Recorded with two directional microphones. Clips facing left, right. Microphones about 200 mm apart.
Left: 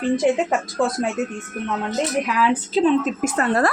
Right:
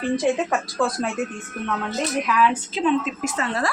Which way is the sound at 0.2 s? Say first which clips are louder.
Left 2 dB; 20° left (ahead or behind).